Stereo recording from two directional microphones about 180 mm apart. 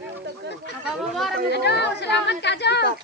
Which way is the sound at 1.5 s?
70° left (ahead or behind).